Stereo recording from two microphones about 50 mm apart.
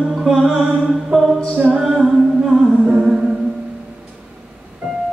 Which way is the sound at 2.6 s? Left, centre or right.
Right.